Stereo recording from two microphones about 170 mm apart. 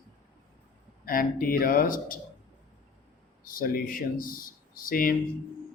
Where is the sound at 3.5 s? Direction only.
55° left (ahead or behind).